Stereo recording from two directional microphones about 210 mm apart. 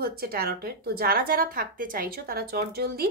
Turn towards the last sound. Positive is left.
turn(degrees=-45)  # may be behind; listen again after turning